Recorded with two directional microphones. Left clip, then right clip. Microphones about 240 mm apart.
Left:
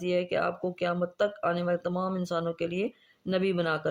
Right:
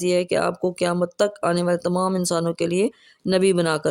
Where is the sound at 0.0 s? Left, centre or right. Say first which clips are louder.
Right 7 dB; right.